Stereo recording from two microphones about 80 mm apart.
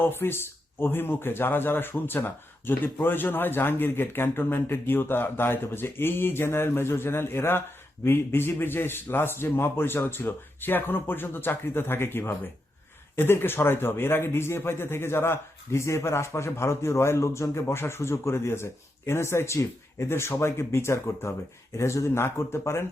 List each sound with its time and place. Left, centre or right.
0.0 s a man's voice: left